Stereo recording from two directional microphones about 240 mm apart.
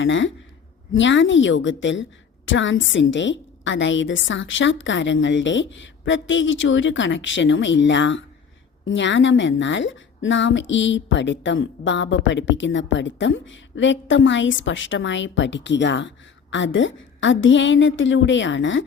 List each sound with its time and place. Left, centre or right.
0.0 s a woman's voice: left